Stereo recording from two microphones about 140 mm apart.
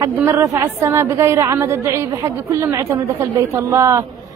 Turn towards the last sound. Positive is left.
turn(degrees=-20)  # may be behind; listen again after turning